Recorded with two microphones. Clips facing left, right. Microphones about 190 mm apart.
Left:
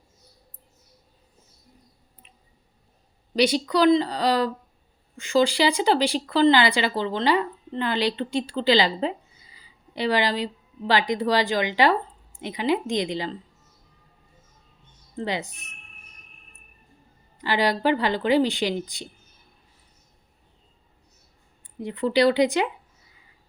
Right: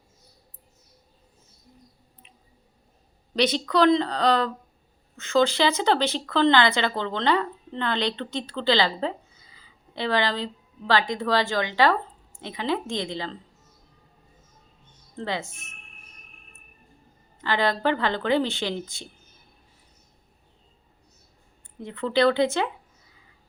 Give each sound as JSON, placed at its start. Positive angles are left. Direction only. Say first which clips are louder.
{"t": 3.3, "sound": "a woman's voice", "louder": "left 1 dB", "side_deg": 10}
{"t": 15.1, "sound": "speech", "louder": "left 2 dB", "side_deg": 15}
{"t": 17.4, "sound": "speech", "louder": "left 1 dB", "side_deg": 10}
{"t": 21.8, "sound": "speech", "louder": "left 2 dB", "side_deg": 15}